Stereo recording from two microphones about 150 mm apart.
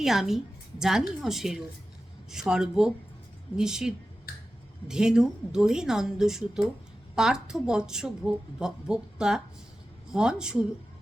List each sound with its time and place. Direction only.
0.0 s a woman's voice: centre (ahead or behind)
4.3 s finger snapping: 80° left
4.9 s a woman's voice: 5° right (ahead or behind)